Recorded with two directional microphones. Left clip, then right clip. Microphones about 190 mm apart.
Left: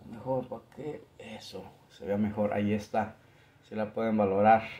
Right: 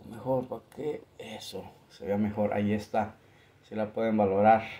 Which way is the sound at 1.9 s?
10° right (ahead or behind).